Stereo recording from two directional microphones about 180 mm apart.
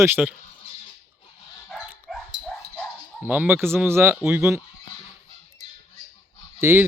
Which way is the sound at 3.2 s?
10° right (ahead or behind).